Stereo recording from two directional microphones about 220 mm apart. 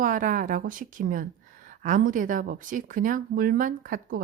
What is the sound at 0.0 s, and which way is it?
A woman's voice, 35° right (ahead or behind).